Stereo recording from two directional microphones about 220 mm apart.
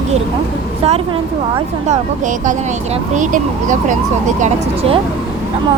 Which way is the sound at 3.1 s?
35° right (ahead or behind).